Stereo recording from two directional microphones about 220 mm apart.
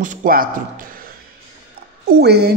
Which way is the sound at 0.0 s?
35° right (ahead or behind).